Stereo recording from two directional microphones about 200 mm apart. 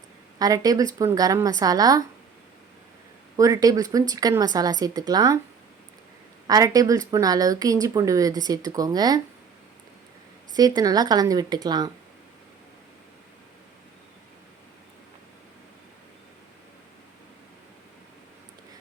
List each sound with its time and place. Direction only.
0.3 s a woman's voice: 20° right (ahead or behind)
3.3 s a woman's voice: 15° right (ahead or behind)
6.5 s a woman's voice: 15° right (ahead or behind)
10.5 s a woman's voice: 20° right (ahead or behind)